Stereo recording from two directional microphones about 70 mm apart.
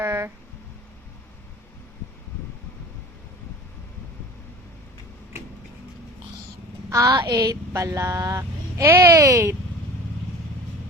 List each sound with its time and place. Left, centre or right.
0.0 s a sound: right
6.9 s speech: right
7.3 s a woman's voice: right